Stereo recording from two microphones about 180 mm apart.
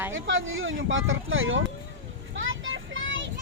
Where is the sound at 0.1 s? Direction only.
90° right.